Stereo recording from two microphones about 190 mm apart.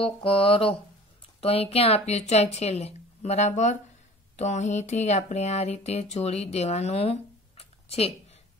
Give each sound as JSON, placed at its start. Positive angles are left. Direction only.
{"t": 0.0, "sound": "speech", "side_deg": 30}